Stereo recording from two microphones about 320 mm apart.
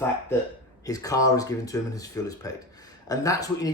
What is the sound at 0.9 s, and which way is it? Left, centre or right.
Speech, centre.